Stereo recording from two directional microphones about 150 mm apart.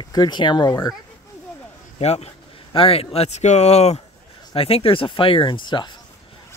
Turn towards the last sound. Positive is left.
turn(degrees=30)  # may be behind; listen again after turning